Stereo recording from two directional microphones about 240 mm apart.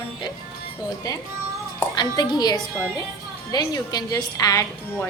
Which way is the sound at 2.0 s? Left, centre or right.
Centre.